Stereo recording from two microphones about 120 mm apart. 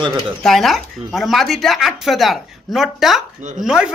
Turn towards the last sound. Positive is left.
turn(degrees=-5)  # may be behind; listen again after turning